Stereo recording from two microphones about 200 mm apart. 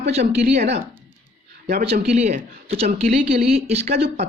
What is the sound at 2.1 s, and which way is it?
Speech, 35° right (ahead or behind).